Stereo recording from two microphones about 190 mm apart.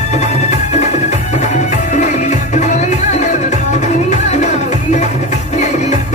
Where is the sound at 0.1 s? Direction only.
35° left (ahead or behind).